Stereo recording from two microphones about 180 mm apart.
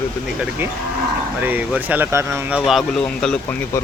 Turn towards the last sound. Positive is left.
turn(degrees=5)  # may be behind; listen again after turning